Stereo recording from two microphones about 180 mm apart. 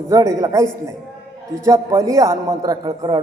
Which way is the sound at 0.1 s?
20° right (ahead or behind).